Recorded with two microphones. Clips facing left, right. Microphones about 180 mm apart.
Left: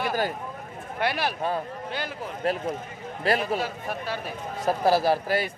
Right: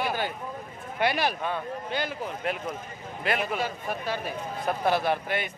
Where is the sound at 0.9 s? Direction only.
5° left (ahead or behind).